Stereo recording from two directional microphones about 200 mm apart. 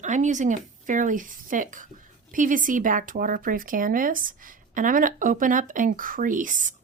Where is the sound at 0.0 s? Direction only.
35° right (ahead or behind).